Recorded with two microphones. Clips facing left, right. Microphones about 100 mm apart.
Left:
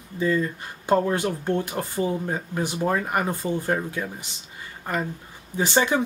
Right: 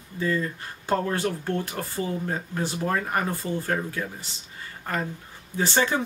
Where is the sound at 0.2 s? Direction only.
15° left (ahead or behind).